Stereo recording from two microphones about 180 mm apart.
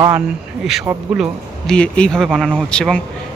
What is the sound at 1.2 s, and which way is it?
Speech, 5° left (ahead or behind).